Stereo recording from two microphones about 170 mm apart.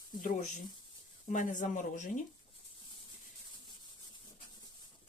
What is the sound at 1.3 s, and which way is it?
Speech, 50° left (ahead or behind).